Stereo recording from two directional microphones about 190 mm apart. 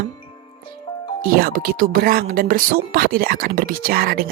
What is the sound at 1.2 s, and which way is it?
Speech, 50° right (ahead or behind).